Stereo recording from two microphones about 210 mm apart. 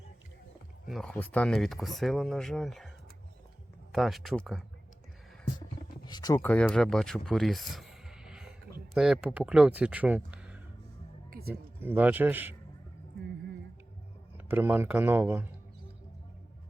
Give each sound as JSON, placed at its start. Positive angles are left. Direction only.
{"t": 0.9, "sound": "speech", "side_deg": 0}
{"t": 3.9, "sound": "speech", "side_deg": 0}
{"t": 6.1, "sound": "speech", "side_deg": 20}
{"t": 11.3, "sound": "a sound", "side_deg": -45}
{"t": 11.8, "sound": "speech", "side_deg": -10}
{"t": 14.3, "sound": "speech", "side_deg": -10}